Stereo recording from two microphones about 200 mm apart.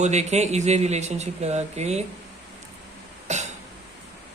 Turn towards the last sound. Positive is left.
turn(degrees=-35)  # may be behind; listen again after turning